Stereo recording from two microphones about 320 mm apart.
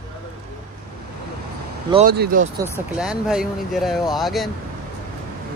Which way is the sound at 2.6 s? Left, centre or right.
Centre.